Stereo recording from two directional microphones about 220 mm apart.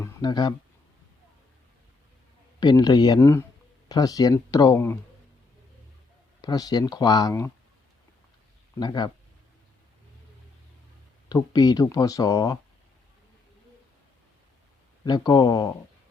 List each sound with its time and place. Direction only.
0.0 s a sound: 20° left (ahead or behind)
2.6 s speech: 20° left (ahead or behind)
6.4 s speech: 15° left (ahead or behind)
8.8 s speech: 20° left (ahead or behind)
11.3 s speech: 15° left (ahead or behind)
15.0 s speech: 20° left (ahead or behind)